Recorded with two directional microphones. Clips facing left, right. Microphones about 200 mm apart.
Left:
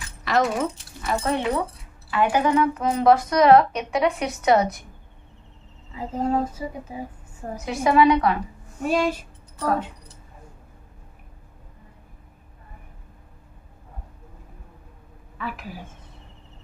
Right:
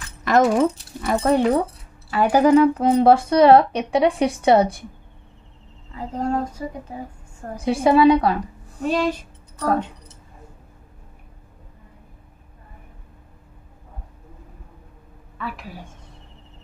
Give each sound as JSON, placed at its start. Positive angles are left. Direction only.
{"t": 0.2, "sound": "keys jangling", "side_deg": -50}
{"t": 0.6, "sound": "a woman's voice", "side_deg": -40}
{"t": 5.9, "sound": "a sound", "side_deg": 5}
{"t": 7.5, "sound": "a woman's voice", "side_deg": -30}
{"t": 8.8, "sound": "a sound", "side_deg": 10}
{"t": 15.3, "sound": "a woman's voice", "side_deg": 0}